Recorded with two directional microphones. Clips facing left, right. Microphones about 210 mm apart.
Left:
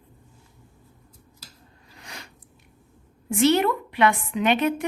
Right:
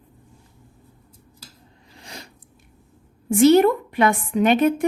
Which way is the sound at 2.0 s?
35° right (ahead or behind).